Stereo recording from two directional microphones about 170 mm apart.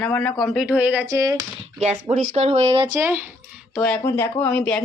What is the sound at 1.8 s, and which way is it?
Speech, 40° right (ahead or behind).